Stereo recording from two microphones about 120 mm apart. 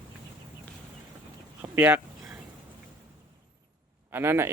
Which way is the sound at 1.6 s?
15° right (ahead or behind).